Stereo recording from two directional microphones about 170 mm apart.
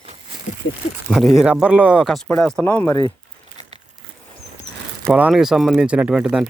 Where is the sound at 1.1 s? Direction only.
Centre (ahead or behind).